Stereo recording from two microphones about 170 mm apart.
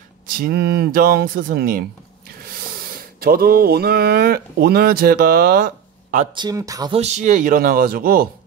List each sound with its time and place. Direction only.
0.3 s speech: 60° right (ahead or behind)
6.3 s speech: 25° right (ahead or behind)
6.9 s speech: 40° right (ahead or behind); by 8.3 s 60° right (ahead or behind)